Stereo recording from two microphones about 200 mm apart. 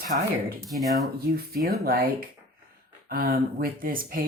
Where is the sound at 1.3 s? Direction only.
50° right (ahead or behind).